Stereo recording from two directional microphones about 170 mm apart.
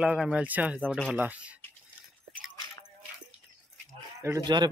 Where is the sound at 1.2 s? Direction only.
10° right (ahead or behind).